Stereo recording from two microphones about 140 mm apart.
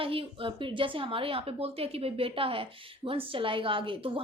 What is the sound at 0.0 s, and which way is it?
A woman's voice, 40° right (ahead or behind).